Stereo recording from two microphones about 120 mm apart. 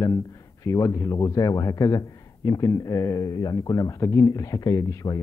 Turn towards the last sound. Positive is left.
turn(degrees=25)  # may be behind; listen again after turning